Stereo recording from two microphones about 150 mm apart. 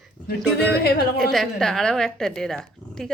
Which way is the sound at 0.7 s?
90° left.